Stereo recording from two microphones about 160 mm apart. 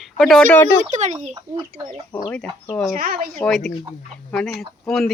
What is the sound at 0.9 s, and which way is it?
Speech, 50° right (ahead or behind).